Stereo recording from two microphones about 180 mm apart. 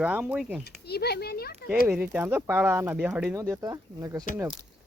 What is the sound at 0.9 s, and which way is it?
Speech, 60° left (ahead or behind).